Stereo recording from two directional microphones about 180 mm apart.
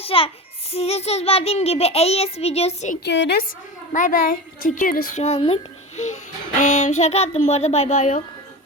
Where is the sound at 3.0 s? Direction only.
75° left (ahead or behind).